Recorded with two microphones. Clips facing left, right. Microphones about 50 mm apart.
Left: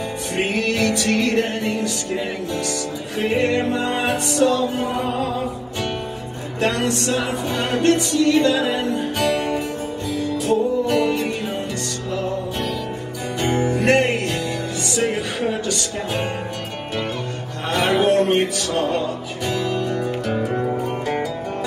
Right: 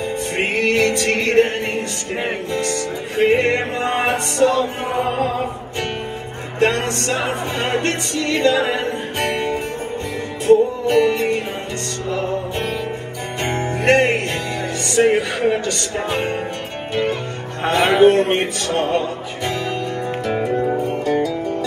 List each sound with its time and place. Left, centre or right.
0.4 s music: right
6.6 s music: right
13.4 s music: right
15.0 s speech: right
17.6 s music: right